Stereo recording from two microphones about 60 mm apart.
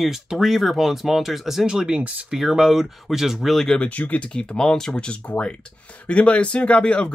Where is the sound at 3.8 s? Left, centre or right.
Left.